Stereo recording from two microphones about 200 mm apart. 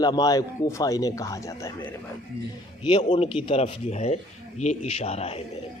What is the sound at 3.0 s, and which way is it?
Speech, 35° left (ahead or behind).